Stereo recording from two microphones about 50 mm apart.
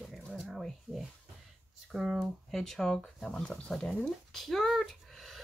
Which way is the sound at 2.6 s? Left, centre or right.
Centre.